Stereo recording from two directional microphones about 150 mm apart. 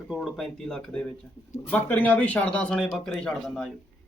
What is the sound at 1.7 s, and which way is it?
Speech, 10° left (ahead or behind).